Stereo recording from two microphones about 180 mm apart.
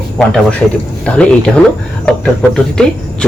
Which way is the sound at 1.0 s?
5° left (ahead or behind).